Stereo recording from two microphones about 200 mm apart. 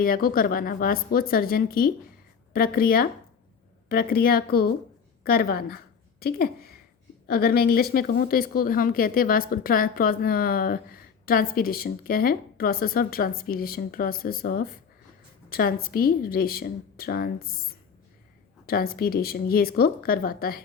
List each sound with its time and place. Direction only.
0.0 s a woman's voice: 45° left (ahead or behind)
18.6 s a woman's voice: 50° left (ahead or behind)